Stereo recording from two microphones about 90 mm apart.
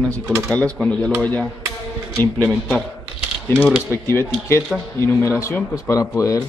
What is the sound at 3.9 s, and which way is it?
Speech, 30° left (ahead or behind).